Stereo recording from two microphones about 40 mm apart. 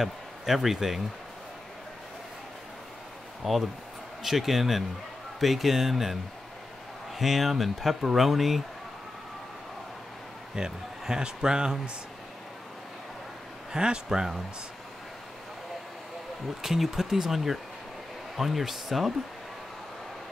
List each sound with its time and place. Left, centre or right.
0.0 s speech: centre
3.4 s speech: centre
7.2 s speech: centre
10.5 s speech: centre
13.7 s speech: centre
16.6 s speech: centre